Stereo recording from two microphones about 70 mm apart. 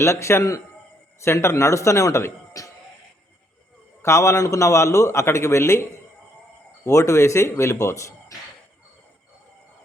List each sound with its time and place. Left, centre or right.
0.0 s a man's voice: left
4.0 s a man's voice: left
6.8 s a man's voice: left